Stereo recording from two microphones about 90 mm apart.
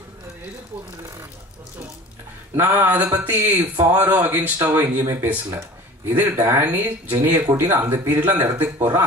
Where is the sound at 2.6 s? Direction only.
25° right (ahead or behind).